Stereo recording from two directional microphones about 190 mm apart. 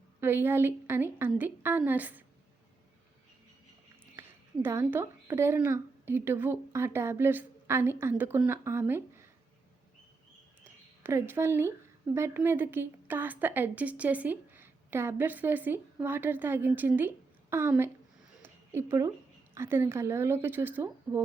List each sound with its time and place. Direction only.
0.2 s a woman's voice: 10° right (ahead or behind)
4.1 s a woman's voice: 10° right (ahead or behind)
10.6 s a woman's voice: 10° right (ahead or behind)
18.4 s a sound: 10° right (ahead or behind)
19.5 s a woman's voice: 10° right (ahead or behind)